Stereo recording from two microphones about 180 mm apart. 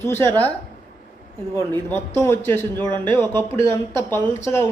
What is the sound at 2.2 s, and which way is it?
Speech, 15° left (ahead or behind).